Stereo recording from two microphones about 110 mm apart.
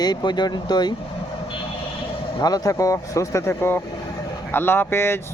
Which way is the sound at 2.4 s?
35° left (ahead or behind).